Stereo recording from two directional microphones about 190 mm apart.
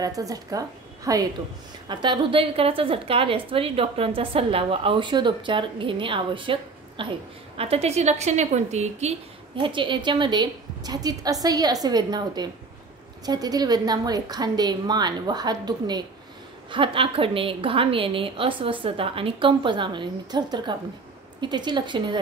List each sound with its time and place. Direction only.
0.0 s a woman's voice: 20° right (ahead or behind); by 9.1 s 35° right (ahead or behind)
9.6 s a woman's voice: 25° right (ahead or behind)